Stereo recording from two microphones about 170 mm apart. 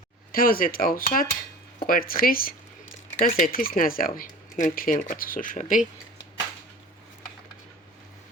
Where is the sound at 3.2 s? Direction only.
45° left (ahead or behind).